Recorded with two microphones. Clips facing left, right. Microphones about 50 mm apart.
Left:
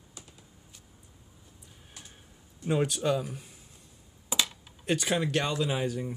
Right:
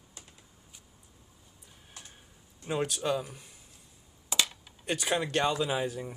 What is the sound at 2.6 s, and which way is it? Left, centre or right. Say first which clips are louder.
Speech: left 3 dB; centre.